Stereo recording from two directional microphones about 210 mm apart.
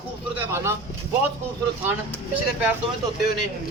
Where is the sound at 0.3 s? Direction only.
10° right (ahead or behind).